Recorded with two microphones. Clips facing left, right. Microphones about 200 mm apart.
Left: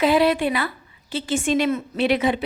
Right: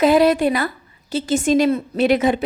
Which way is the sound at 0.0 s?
45° right (ahead or behind).